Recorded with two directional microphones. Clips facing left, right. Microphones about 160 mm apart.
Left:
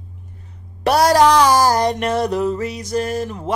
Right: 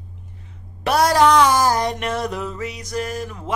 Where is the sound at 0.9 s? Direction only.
35° left (ahead or behind).